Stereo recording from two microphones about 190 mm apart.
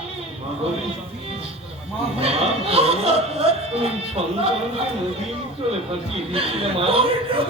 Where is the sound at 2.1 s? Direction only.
30° right (ahead or behind).